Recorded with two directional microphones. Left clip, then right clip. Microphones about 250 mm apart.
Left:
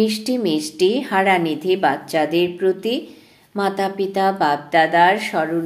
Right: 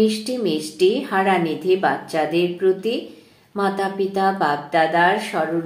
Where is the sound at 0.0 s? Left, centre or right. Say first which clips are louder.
Even; left.